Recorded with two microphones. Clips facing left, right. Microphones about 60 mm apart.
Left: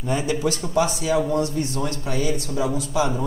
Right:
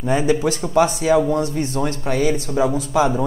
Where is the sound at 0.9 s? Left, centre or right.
Right.